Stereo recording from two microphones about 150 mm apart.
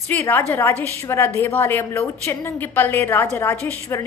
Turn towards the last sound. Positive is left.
turn(degrees=15)  # may be behind; listen again after turning